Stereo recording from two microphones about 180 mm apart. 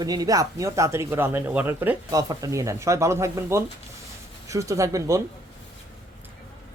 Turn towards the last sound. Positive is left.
turn(degrees=-20)  # may be behind; listen again after turning